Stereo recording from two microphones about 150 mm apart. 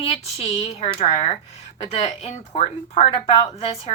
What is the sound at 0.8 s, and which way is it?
Speech, 40° left (ahead or behind).